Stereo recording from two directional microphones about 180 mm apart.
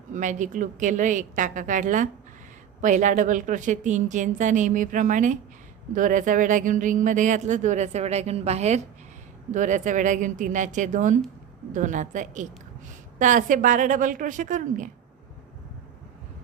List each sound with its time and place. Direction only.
0.1 s speech: 45° right (ahead or behind)